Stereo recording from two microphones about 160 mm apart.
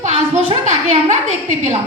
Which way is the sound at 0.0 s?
45° right (ahead or behind).